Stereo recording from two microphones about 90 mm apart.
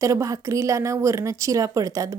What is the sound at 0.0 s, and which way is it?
Speech, 35° right (ahead or behind).